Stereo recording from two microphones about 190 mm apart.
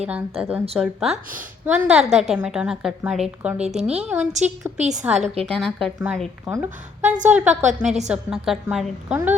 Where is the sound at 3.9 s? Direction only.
5° right (ahead or behind).